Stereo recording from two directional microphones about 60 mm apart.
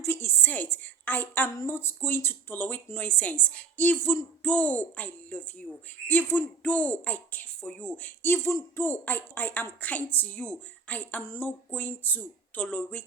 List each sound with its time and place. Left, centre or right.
0.0 s a sound: left
1.6 s speech: left
8.4 s speech: left